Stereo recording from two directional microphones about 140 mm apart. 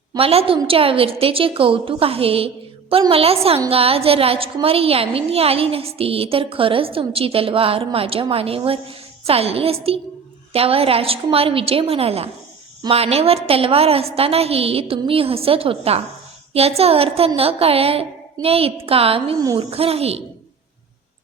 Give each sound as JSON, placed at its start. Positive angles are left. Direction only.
{"t": 0.2, "sound": "a woman's voice", "side_deg": -45}